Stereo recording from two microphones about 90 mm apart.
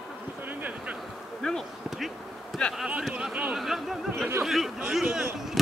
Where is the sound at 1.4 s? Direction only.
Centre (ahead or behind).